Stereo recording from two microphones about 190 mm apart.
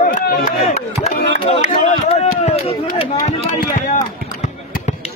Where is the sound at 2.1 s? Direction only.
35° left (ahead or behind).